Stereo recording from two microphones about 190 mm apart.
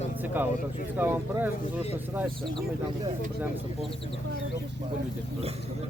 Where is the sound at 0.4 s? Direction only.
10° right (ahead or behind).